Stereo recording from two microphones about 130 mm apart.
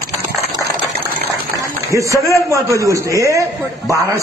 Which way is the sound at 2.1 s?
25° left (ahead or behind).